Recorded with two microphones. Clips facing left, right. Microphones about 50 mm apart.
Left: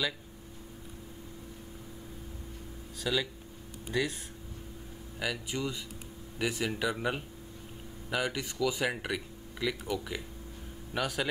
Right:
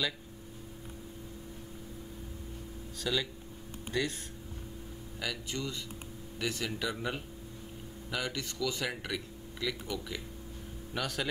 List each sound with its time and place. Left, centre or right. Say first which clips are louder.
3.0 s a man's voice: left 2 dB; centre